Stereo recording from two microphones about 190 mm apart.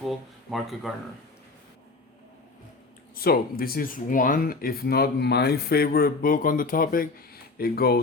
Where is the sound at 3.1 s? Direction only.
50° left (ahead or behind).